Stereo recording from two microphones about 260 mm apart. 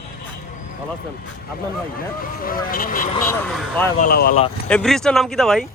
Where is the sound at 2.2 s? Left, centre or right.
Left.